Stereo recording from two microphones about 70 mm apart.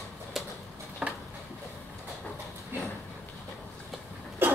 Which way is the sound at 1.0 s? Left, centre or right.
Centre.